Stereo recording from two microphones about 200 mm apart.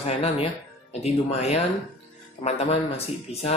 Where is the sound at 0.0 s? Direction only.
30° left (ahead or behind).